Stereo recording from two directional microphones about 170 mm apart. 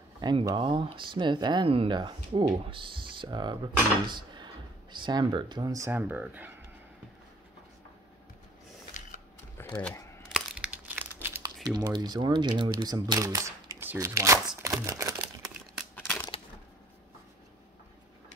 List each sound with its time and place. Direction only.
0.2 s speech: 25° right (ahead or behind); by 6.5 s 10° right (ahead or behind)
9.6 s a sound: 15° left (ahead or behind)
10.3 s crumpling: 5° right (ahead or behind)
11.6 s speech: 25° right (ahead or behind)
14.6 s a sound: 20° right (ahead or behind)
15.9 s crushing: 10° left (ahead or behind)